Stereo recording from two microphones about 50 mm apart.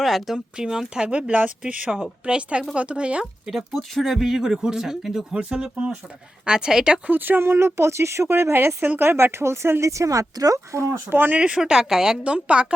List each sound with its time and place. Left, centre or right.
0.0 s speech: centre
0.3 s speech: centre
3.8 s speech: centre
4.1 s speech: centre
5.4 s speech: centre
7.1 s speech: right
9.8 s speech: right
11.1 s speech: right
11.3 s speech: right
11.6 s speech: centre